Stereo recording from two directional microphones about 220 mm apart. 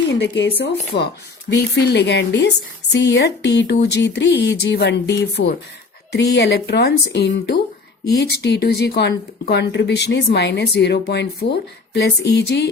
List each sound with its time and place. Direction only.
0.1 s speech: 55° left (ahead or behind)